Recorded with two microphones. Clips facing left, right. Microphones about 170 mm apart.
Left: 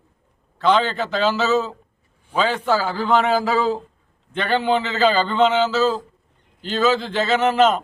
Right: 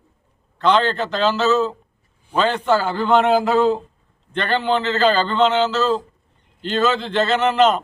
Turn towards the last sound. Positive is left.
turn(degrees=5)  # may be behind; listen again after turning